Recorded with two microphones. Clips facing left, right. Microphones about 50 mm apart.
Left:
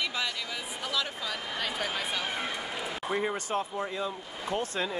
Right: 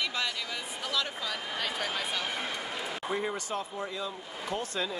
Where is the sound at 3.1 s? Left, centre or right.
Centre.